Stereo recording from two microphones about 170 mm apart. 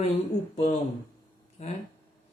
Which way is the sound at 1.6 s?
45° left (ahead or behind).